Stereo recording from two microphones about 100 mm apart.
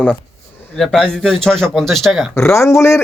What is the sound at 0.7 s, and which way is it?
Speech, 5° left (ahead or behind).